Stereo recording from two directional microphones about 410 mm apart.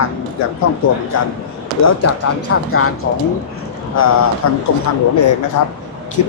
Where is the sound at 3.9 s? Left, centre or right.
Left.